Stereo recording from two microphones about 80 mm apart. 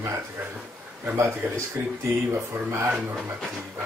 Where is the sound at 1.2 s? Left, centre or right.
Right.